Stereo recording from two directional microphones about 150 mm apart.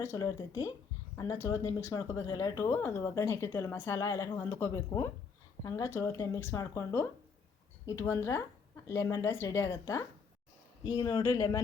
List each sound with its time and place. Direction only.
0.0 s speech: 20° left (ahead or behind)